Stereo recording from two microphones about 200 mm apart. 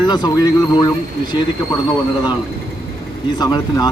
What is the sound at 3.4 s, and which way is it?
Speech, 20° left (ahead or behind).